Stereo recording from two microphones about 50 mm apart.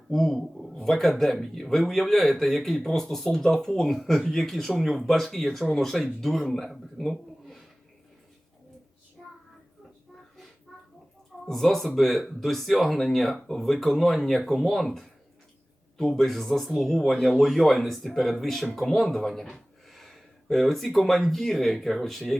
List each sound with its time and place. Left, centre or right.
0.1 s a man's voice: centre
9.2 s child singing: centre
11.4 s speech: centre